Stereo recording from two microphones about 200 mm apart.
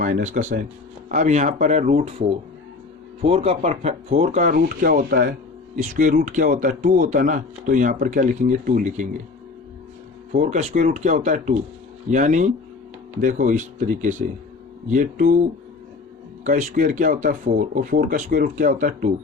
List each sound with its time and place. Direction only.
0.0 s speech: 40° right (ahead or behind)
10.3 s speech: 35° right (ahead or behind)
16.4 s speech: 40° right (ahead or behind)